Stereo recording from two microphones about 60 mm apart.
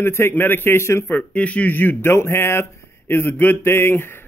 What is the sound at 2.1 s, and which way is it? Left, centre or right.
A man's voice, left.